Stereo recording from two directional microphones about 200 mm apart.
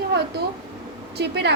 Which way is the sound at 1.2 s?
55° right (ahead or behind).